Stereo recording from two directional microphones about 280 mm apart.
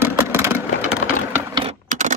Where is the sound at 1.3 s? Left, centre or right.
Centre.